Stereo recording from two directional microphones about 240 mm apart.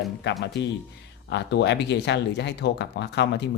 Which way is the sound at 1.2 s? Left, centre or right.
Left.